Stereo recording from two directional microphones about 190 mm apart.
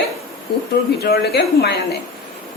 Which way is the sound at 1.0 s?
55° left (ahead or behind).